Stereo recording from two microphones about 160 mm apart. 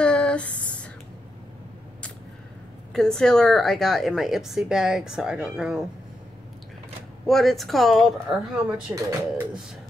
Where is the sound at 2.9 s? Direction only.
5° left (ahead or behind).